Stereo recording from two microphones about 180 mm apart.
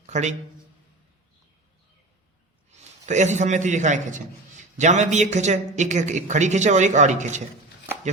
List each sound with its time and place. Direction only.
0.0 s a man's voice: 40° right (ahead or behind)
2.7 s a man's voice: 40° right (ahead or behind)